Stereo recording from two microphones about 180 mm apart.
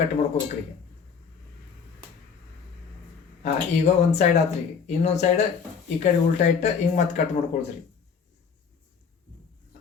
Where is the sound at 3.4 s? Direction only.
40° left (ahead or behind).